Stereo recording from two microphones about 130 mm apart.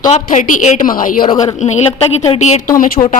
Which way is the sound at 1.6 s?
55° left (ahead or behind).